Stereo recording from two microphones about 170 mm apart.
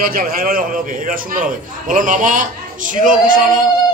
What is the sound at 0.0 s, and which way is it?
A man's voice, 60° right (ahead or behind).